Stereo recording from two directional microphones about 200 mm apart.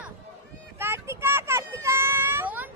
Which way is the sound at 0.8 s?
10° right (ahead or behind).